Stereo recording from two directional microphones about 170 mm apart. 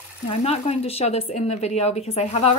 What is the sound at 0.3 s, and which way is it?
Speech, 40° left (ahead or behind).